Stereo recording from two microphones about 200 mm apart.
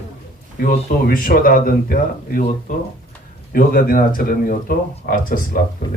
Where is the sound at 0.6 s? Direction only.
45° left (ahead or behind).